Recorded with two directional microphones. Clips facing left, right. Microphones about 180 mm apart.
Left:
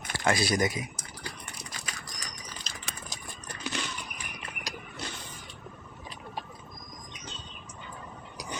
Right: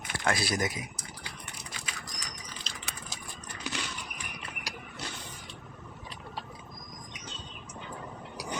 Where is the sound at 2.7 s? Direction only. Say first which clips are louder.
Even; 45° left (ahead or behind).